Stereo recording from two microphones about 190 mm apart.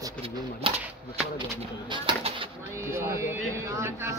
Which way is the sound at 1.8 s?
25° right (ahead or behind).